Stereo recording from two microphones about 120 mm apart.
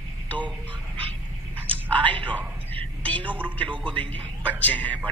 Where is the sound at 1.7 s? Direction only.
10° left (ahead or behind).